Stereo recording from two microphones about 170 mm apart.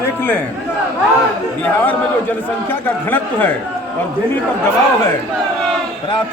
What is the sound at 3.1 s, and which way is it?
Speech, 10° left (ahead or behind).